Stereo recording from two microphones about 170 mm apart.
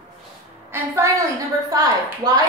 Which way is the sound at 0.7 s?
20° right (ahead or behind).